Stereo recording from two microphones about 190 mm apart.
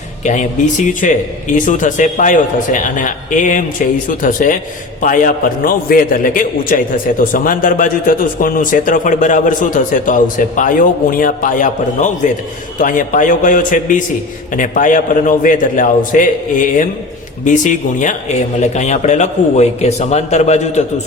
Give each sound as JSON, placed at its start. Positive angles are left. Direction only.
{"t": 0.3, "sound": "a man's voice", "side_deg": 40}